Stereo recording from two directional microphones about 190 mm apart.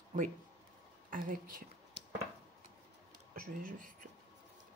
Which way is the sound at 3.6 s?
45° right (ahead or behind).